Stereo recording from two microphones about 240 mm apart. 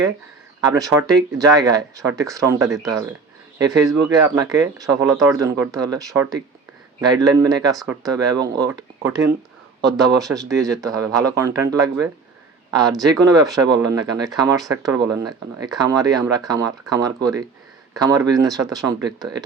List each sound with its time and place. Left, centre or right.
0.9 s speech: centre
10.3 s speech: centre